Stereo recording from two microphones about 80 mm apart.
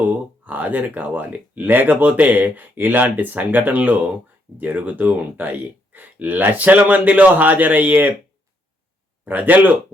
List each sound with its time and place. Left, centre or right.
0.0 s speech: right
9.2 s speech: right